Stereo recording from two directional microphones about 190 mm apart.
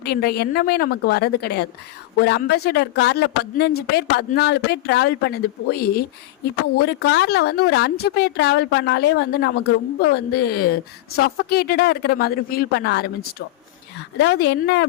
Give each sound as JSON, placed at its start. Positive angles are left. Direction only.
{"t": 0.0, "sound": "speech", "side_deg": 55}
{"t": 14.2, "sound": "speech", "side_deg": 60}